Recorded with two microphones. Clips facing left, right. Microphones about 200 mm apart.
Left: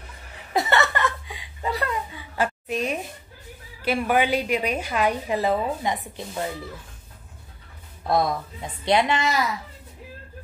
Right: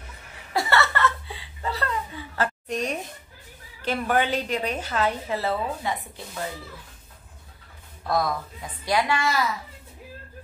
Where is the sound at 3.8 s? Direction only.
10° left (ahead or behind).